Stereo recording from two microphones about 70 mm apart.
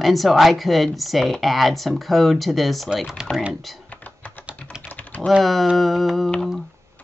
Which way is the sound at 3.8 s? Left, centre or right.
Left.